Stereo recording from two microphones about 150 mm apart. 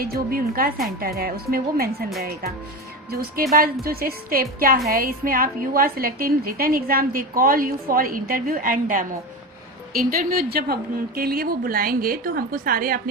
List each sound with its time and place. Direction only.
0.0 s a woman's voice: 80° right
3.5 s a woman's voice: 75° right (ahead or behind)